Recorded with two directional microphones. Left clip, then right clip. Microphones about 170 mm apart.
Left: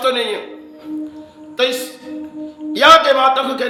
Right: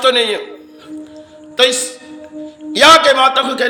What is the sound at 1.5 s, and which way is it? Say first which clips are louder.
A man's voice: right 5 dB; 20° right (ahead or behind).